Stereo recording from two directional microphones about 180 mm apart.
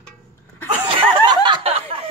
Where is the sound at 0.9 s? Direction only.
25° right (ahead or behind).